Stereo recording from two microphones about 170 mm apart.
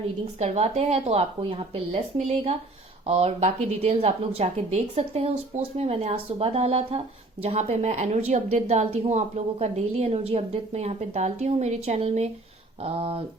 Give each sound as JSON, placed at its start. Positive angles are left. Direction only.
{"t": 0.3, "sound": "a woman's voice", "side_deg": -40}